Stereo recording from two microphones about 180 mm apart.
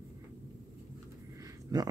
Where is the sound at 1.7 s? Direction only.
20° right (ahead or behind).